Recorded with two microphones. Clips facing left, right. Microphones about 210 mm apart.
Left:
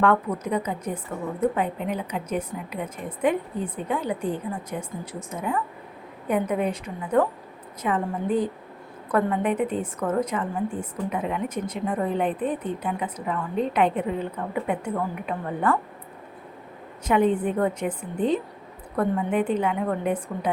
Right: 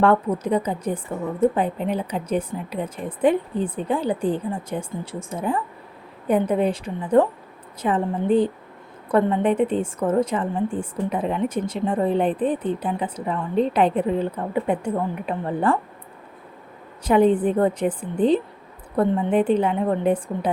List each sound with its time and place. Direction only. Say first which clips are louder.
0.0 s a woman's voice: right 3 dB; 30° right (ahead or behind)
17.0 s a woman's voice: right 4 dB; 35° right (ahead or behind)